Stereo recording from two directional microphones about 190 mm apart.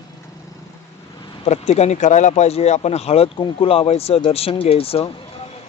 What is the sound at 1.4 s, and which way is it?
Speech, 35° left (ahead or behind).